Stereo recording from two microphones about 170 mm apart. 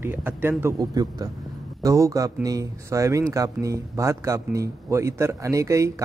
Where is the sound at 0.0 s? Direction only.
10° right (ahead or behind).